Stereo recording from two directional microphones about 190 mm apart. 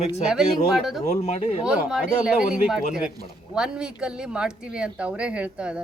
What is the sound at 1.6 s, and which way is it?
Speech, 5° right (ahead or behind).